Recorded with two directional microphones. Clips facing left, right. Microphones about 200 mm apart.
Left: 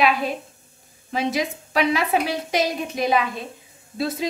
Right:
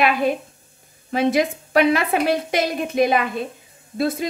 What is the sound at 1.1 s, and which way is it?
A woman's voice, 55° right (ahead or behind).